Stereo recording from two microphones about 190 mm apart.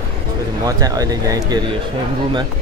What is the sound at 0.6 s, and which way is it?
Speech, 20° right (ahead or behind).